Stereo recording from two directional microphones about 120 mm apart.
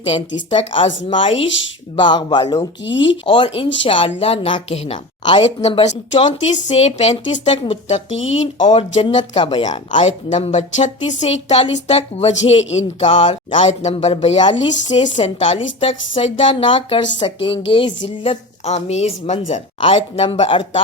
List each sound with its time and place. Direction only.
0.0 s a woman's voice: 50° left (ahead or behind)
2.0 s a woman's voice: 40° left (ahead or behind); by 4.9 s 55° left (ahead or behind)
5.2 s speech: 40° left (ahead or behind)
5.6 s speech: 60° left (ahead or behind)
7.5 s a woman's voice: 45° left (ahead or behind)
7.9 s speech: 65° left (ahead or behind)
8.5 s speech: 45° left (ahead or behind); by 13.1 s 65° left (ahead or behind)
13.5 s speech: 75° left (ahead or behind)
14.8 s speech: 75° left (ahead or behind)
15.2 s a woman's voice: 55° left (ahead or behind)